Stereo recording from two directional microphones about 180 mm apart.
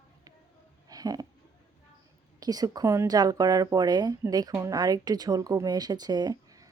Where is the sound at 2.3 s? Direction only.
20° right (ahead or behind).